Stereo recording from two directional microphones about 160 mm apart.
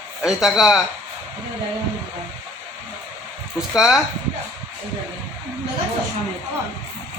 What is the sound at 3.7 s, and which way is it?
Speech, 5° right (ahead or behind).